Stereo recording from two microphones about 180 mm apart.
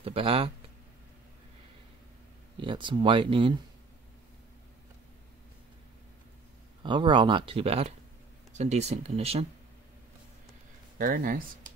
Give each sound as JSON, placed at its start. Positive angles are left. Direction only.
{"t": 0.0, "sound": "speech", "side_deg": -30}
{"t": 2.6, "sound": "speech", "side_deg": -25}
{"t": 6.8, "sound": "speech", "side_deg": -25}
{"t": 11.0, "sound": "speech", "side_deg": -50}